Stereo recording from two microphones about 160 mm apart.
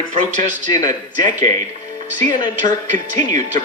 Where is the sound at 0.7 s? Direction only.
20° left (ahead or behind).